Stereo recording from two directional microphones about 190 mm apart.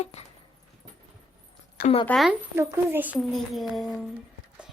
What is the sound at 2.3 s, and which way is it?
A woman's voice, 15° right (ahead or behind).